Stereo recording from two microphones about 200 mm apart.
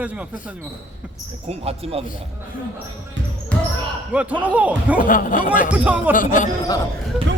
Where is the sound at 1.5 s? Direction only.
30° right (ahead or behind).